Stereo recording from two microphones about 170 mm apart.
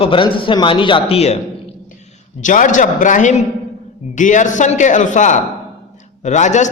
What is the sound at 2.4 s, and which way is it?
A man's voice, 50° left (ahead or behind).